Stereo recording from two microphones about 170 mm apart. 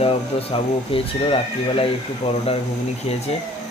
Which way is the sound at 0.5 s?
35° left (ahead or behind).